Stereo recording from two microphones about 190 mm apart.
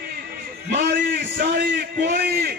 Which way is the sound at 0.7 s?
50° right (ahead or behind).